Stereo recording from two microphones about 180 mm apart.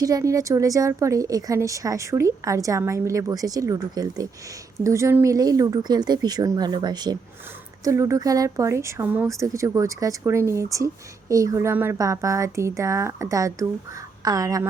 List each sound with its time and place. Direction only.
0.0 s a woman's voice: 20° right (ahead or behind)